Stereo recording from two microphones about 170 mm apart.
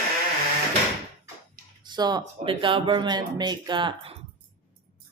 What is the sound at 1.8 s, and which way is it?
A woman's voice, 25° right (ahead or behind).